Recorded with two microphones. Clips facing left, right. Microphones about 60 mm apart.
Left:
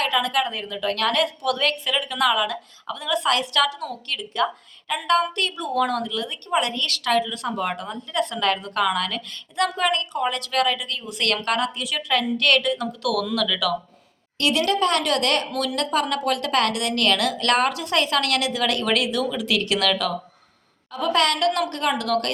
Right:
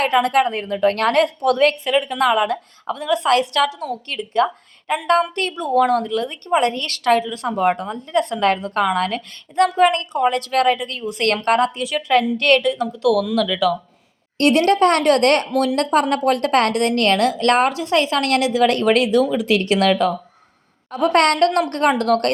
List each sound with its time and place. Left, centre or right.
0.0 s a woman's voice: right
14.3 s a woman's voice: right
20.9 s a woman's voice: right